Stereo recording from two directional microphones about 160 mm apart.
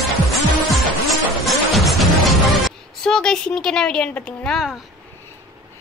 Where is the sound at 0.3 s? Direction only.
Centre (ahead or behind).